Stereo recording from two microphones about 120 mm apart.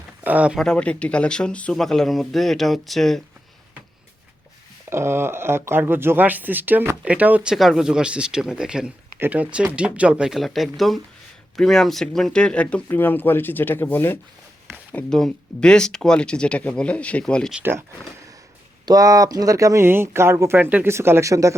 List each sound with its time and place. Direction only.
0.3 s speech: 10° right (ahead or behind)
0.6 s speech: 10° left (ahead or behind)
4.9 s speech: 20° right (ahead or behind)
7.5 s speech: centre (ahead or behind); by 14.2 s 15° left (ahead or behind)
14.9 s speech: 5° left (ahead or behind)
17.6 s speech: 20° right (ahead or behind)
18.9 s speech: 30° right (ahead or behind)